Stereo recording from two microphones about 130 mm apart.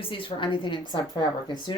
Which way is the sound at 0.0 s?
45° left (ahead or behind).